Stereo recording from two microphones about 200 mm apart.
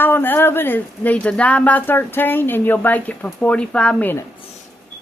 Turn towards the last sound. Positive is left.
turn(degrees=5)  # may be behind; listen again after turning